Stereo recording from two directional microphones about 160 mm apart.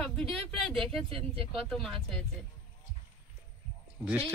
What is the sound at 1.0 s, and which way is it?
Speech, 35° right (ahead or behind).